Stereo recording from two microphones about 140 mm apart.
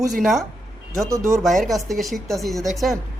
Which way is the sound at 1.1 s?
20° right (ahead or behind).